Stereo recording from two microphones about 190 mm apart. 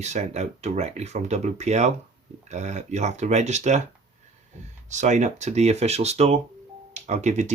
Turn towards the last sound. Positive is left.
turn(degrees=-40)  # may be behind; listen again after turning